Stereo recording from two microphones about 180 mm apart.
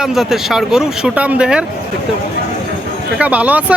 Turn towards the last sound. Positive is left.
turn(degrees=-10)  # may be behind; listen again after turning